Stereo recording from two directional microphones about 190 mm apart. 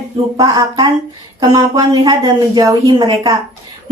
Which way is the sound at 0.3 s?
20° right (ahead or behind).